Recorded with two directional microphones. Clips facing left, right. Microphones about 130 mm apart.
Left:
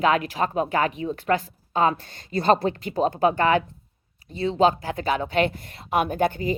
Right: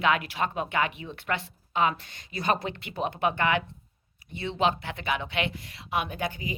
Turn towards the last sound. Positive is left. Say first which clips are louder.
# left 10 dB
turn(degrees=50)  # may be behind; listen again after turning